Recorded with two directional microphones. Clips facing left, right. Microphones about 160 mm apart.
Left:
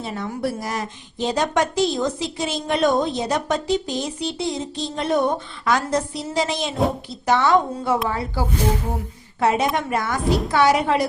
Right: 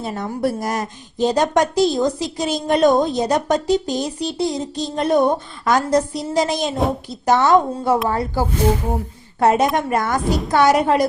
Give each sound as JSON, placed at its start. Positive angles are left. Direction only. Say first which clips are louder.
{"t": 0.0, "sound": "a woman's voice", "louder": "right 4 dB", "side_deg": -45}
{"t": 10.2, "sound": "a woman's voice", "louder": "even", "side_deg": 0}
{"t": 10.5, "sound": "a woman's voice", "louder": "right 4 dB", "side_deg": -45}